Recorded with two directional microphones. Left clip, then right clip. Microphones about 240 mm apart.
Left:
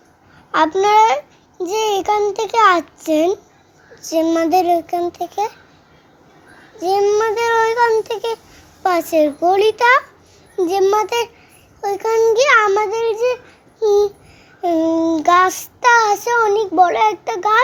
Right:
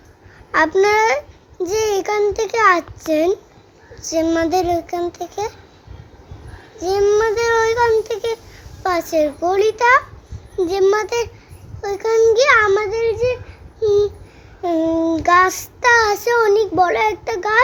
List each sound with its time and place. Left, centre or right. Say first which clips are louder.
0.5 s child singing: left 2 dB; centre
6.8 s child singing: even; centre
8.8 s a child's voice: left 2 dB; centre
14.6 s child singing: left 2 dB; centre